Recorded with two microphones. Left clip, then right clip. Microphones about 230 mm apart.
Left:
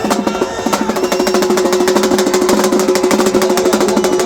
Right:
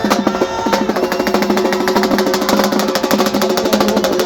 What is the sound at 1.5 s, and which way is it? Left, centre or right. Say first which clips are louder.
Music: left 2 dB; centre.